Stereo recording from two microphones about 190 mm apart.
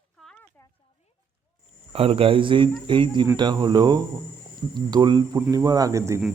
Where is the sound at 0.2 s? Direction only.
5° left (ahead or behind).